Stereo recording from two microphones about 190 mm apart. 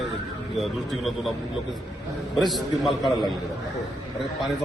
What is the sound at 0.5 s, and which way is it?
Speech, centre (ahead or behind).